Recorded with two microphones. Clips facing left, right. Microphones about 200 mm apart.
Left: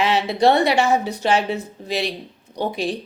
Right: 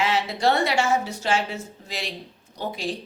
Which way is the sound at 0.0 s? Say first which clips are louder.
Left 5 dB; 65° left (ahead or behind).